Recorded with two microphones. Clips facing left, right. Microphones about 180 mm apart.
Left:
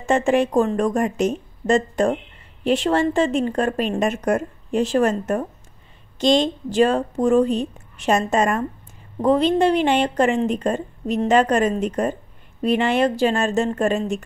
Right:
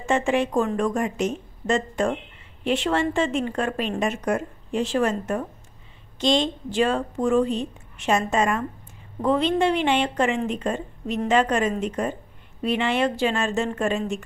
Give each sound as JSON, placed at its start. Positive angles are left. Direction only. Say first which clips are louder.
{"t": 0.0, "sound": "a woman's voice", "louder": "left 4 dB", "side_deg": 40}